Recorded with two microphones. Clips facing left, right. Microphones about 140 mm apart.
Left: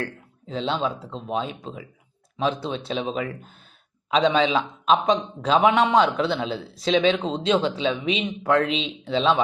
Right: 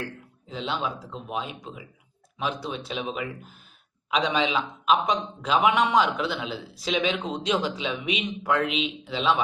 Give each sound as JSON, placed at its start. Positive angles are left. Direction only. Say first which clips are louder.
{"t": 0.4, "sound": "a man's voice", "louder": "left 5 dB", "side_deg": 30}
{"t": 4.4, "sound": "a man's voice", "louder": "left 4 dB", "side_deg": 35}